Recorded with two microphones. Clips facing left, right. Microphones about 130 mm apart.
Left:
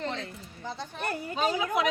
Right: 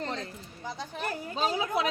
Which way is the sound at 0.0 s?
40° right (ahead or behind).